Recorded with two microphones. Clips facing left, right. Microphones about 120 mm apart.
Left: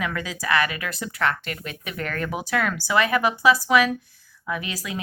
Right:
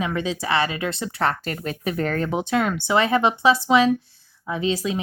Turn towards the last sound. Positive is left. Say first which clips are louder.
# right 7 dB
turn(degrees=-25)  # may be behind; listen again after turning